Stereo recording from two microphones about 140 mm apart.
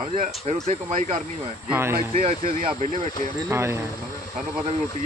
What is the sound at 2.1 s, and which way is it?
Speech, 50° right (ahead or behind).